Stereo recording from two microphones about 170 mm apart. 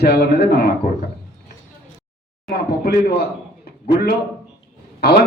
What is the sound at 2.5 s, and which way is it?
Speech, 65° left (ahead or behind).